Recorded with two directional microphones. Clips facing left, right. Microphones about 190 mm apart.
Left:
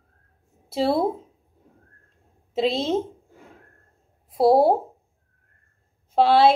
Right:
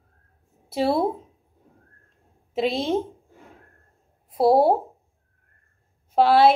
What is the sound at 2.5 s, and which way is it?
Speech, 25° left (ahead or behind).